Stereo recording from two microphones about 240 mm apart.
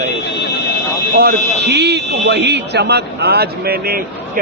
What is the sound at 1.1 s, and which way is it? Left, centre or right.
A man's voice, right.